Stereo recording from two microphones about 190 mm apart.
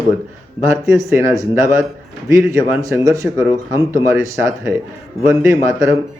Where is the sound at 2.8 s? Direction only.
15° right (ahead or behind).